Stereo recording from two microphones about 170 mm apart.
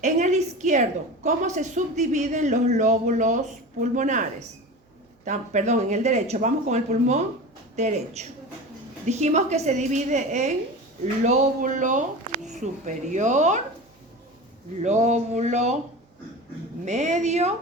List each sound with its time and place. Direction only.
0.0 s a woman's voice: 45° right (ahead or behind)
5.2 s a woman's voice: 45° right (ahead or behind)
14.8 s a woman's voice: 45° right (ahead or behind)
16.8 s a woman's voice: 45° right (ahead or behind)